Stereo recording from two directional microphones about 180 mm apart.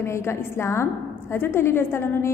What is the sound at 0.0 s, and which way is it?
A woman's voice, 15° left (ahead or behind).